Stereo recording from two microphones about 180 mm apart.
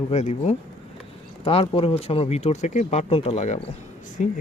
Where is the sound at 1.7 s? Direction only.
35° left (ahead or behind).